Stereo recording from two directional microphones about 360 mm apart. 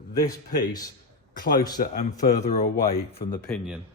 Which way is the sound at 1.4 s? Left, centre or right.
Left.